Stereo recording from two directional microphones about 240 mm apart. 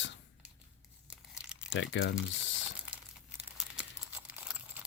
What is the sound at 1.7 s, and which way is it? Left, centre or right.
Speech, left.